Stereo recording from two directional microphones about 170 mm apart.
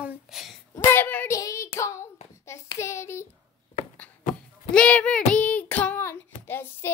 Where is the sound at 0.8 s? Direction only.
10° left (ahead or behind).